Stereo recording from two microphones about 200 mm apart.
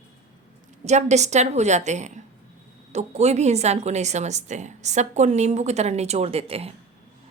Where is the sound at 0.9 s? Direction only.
35° right (ahead or behind).